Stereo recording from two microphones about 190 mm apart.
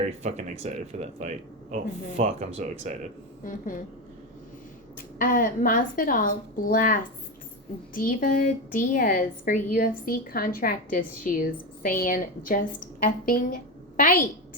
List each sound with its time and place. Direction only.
0.0 s speech: 35° right (ahead or behind)
4.9 s a woman's voice: 45° left (ahead or behind)